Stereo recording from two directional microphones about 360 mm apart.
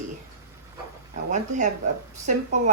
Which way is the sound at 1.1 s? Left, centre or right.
Centre.